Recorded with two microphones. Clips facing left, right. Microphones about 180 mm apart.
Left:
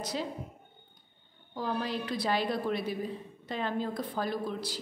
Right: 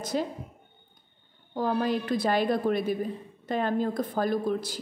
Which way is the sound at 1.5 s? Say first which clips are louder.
Right 7 dB; 50° right (ahead or behind).